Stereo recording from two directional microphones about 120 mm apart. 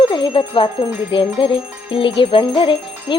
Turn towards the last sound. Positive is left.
turn(degrees=45)  # may be behind; listen again after turning